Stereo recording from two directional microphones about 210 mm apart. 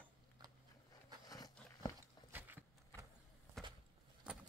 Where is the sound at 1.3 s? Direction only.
15° left (ahead or behind).